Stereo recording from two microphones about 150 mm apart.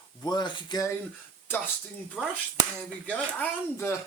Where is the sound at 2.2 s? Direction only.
5° left (ahead or behind).